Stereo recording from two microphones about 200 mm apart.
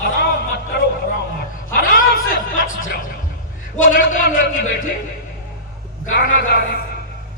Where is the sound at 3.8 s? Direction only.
40° left (ahead or behind).